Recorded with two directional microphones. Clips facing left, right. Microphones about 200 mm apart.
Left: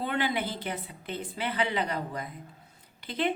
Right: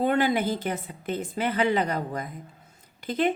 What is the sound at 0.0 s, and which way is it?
Speech, 45° right (ahead or behind).